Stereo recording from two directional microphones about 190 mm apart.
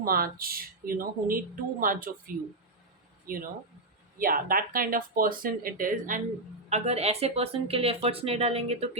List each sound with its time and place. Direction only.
0.0 s speech: 50° right (ahead or behind)
6.7 s speech: 35° right (ahead or behind)